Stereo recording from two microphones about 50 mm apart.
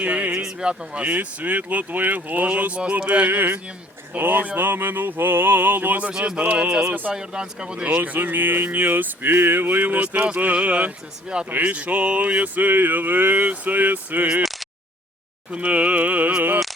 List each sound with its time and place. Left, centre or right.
0.0 s a sound: right
0.4 s speech: right
6.1 s speech: centre; by 14.3 s right
15.5 s speech: right